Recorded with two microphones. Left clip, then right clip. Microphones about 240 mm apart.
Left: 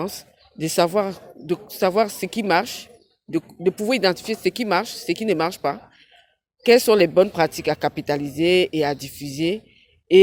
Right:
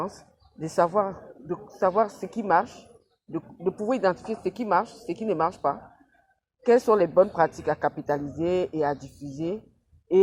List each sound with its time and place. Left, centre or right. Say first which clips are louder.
0.6 s speech: left 3 dB; left